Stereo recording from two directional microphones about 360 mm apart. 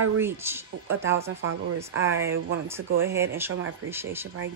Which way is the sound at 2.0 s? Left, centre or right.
Centre.